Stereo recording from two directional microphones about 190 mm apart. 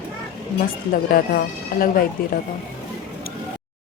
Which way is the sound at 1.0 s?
50° left (ahead or behind).